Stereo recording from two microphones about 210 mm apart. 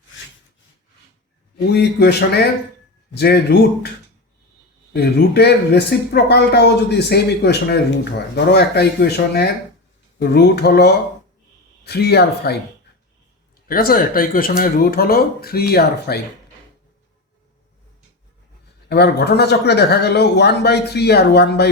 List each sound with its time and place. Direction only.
1.7 s speech: 50° left (ahead or behind)
4.9 s speech: 50° left (ahead or behind)
13.7 s speech: 45° left (ahead or behind)
18.9 s speech: 50° left (ahead or behind)